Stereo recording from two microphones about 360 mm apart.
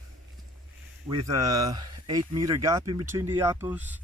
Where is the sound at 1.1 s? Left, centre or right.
Centre.